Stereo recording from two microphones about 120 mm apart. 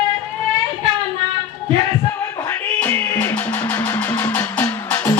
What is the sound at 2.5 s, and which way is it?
Music, 20° left (ahead or behind).